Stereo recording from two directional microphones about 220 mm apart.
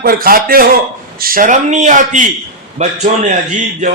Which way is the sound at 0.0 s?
40° right (ahead or behind).